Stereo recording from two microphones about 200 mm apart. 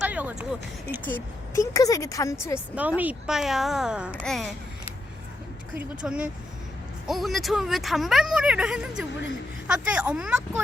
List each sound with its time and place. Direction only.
0.0 s a sound: 5° right (ahead or behind)
1.0 s speech: 10° left (ahead or behind)
2.7 s speech: 5° right (ahead or behind)
5.7 s speech: 5° right (ahead or behind)